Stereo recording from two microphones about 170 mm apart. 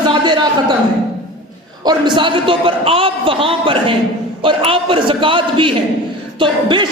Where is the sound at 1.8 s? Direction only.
25° right (ahead or behind).